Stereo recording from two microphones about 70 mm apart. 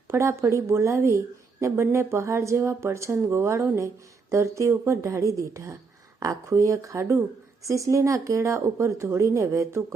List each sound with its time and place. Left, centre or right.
0.1 s speech: right